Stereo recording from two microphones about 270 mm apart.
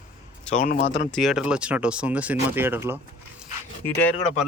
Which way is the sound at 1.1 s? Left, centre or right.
Centre.